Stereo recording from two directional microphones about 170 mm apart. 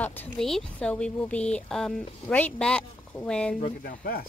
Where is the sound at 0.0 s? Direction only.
10° left (ahead or behind).